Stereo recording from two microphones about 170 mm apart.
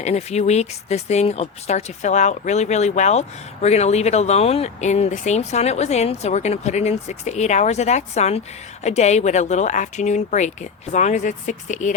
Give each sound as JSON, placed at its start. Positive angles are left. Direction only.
{"t": 0.0, "sound": "speech", "side_deg": 40}